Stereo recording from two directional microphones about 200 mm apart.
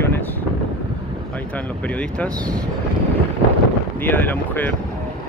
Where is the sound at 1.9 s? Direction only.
5° left (ahead or behind).